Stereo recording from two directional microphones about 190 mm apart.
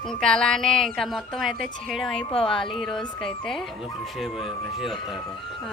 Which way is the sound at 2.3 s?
30° left (ahead or behind).